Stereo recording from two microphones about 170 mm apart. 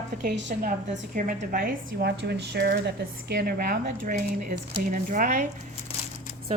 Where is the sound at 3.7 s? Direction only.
50° right (ahead or behind).